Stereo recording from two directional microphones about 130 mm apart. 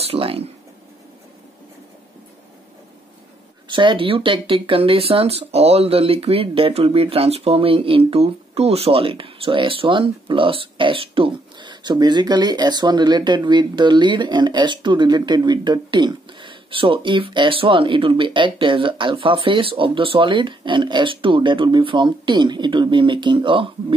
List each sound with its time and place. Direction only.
0.0 s speech: 45° right (ahead or behind)
3.6 s speech: 40° right (ahead or behind)